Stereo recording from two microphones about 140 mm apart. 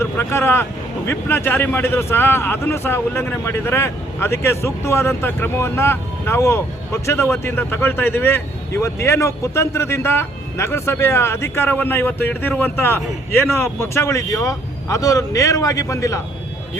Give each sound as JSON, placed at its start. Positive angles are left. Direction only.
{"t": 0.0, "sound": "speech", "side_deg": 20}